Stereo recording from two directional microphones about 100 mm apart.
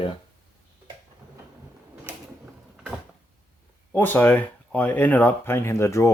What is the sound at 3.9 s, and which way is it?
Speech, 20° left (ahead or behind).